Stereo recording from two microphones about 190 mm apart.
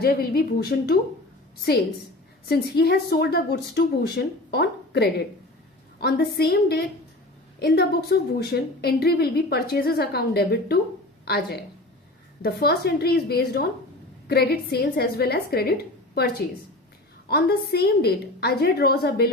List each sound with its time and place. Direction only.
0.0 s speech: 55° left (ahead or behind)
2.5 s a woman's voice: 55° left (ahead or behind)
17.2 s a woman's voice: 55° left (ahead or behind)